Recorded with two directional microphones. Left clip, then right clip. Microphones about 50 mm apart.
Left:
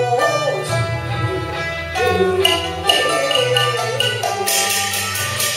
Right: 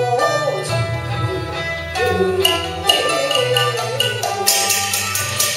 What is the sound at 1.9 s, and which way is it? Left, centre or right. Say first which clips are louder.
Music: left 1 dB; centre.